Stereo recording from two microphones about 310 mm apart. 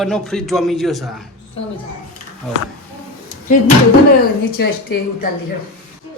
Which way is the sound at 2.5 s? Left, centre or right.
Centre.